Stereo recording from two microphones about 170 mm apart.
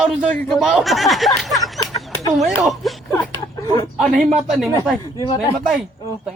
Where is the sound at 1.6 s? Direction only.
20° left (ahead or behind).